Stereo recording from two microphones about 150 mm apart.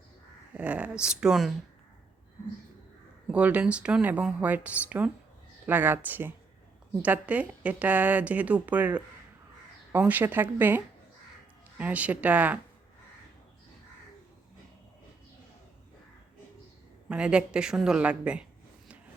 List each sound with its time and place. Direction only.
0.5 s speech: 10° right (ahead or behind)
3.2 s speech: 10° right (ahead or behind)
17.1 s speech: 5° right (ahead or behind)